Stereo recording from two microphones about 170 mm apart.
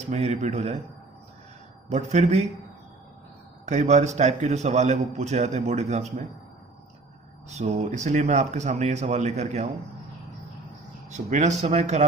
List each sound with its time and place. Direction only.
0.1 s speech: 40° right (ahead or behind)
1.9 s speech: 40° right (ahead or behind)
3.7 s a man's voice: 45° right (ahead or behind)
7.5 s speech: 40° right (ahead or behind)
11.1 s speech: 45° right (ahead or behind)